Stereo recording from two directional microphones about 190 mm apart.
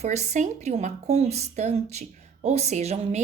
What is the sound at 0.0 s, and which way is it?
A woman's voice, 35° right (ahead or behind).